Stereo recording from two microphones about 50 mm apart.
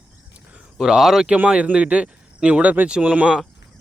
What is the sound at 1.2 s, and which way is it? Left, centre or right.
Speech, right.